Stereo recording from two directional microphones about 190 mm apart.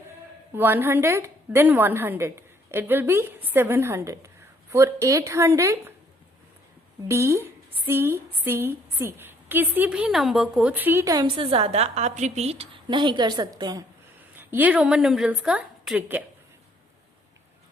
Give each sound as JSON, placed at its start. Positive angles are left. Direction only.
{"t": 0.5, "sound": "a woman's voice", "side_deg": -10}
{"t": 7.1, "sound": "a woman's voice", "side_deg": -15}